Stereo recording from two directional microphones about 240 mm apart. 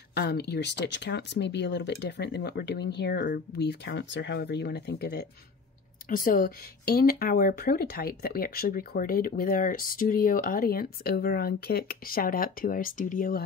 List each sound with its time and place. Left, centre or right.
0.1 s speech: left